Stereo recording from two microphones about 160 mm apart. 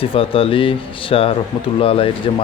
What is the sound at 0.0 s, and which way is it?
Speech, 35° left (ahead or behind).